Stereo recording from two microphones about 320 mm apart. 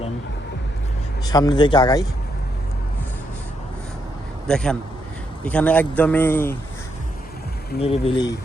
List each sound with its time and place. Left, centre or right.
1.2 s a man's voice: centre
4.4 s a man's voice: centre
7.8 s a man's voice: centre